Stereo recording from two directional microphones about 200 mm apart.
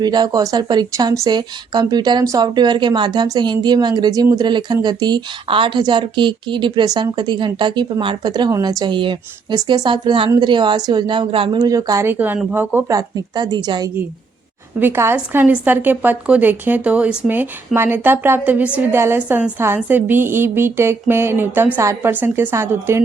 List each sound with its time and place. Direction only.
0.0 s speech: 20° right (ahead or behind)
14.8 s a woman's voice: 10° right (ahead or behind)